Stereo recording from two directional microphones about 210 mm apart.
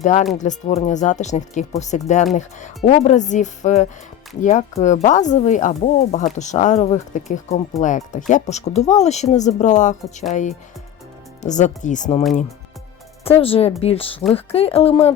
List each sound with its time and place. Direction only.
0.0 s speech: 35° left (ahead or behind)
11.4 s speech: 35° left (ahead or behind)
13.2 s speech: 25° left (ahead or behind)